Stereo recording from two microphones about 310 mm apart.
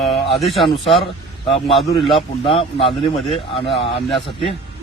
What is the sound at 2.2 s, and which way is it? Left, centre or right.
Speech, centre.